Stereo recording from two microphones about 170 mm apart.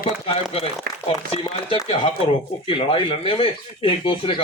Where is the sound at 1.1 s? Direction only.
35° left (ahead or behind).